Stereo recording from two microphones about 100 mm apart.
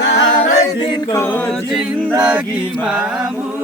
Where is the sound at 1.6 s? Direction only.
5° right (ahead or behind).